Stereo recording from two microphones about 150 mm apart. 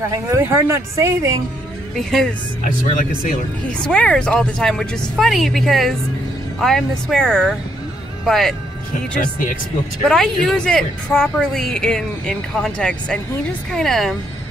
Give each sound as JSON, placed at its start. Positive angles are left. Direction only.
{"t": 0.1, "sound": "speech", "side_deg": -20}
{"t": 2.0, "sound": "speech", "side_deg": 0}
{"t": 2.6, "sound": "speech", "side_deg": 60}
{"t": 3.8, "sound": "speech", "side_deg": 5}
{"t": 10.0, "sound": "speech", "side_deg": 5}